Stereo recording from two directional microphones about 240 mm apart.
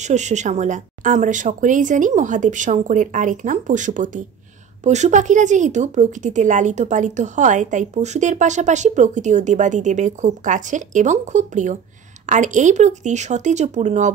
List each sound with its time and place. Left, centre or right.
0.0 s speech: right